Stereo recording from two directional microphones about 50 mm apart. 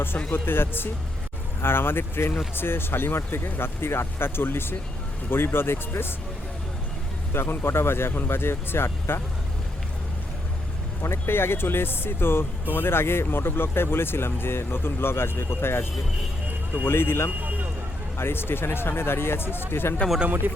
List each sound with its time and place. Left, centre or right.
0.3 s speech: left
7.3 s speech: left
11.0 s speech: left
20.2 s speech: right